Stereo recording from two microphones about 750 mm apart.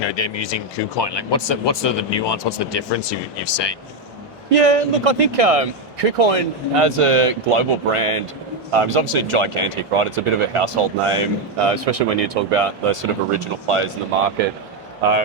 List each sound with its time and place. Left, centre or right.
0.0 s speech: left
4.5 s speech: right